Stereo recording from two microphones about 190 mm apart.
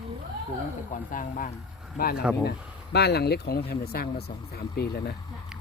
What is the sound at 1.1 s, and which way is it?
Speech, 45° left (ahead or behind).